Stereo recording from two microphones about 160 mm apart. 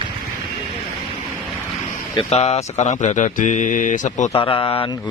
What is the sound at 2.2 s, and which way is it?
Speech, 40° left (ahead or behind).